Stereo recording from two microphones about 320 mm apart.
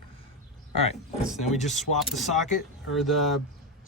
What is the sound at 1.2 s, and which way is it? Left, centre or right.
Speech, centre.